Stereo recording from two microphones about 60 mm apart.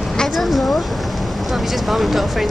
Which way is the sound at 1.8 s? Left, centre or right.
Centre.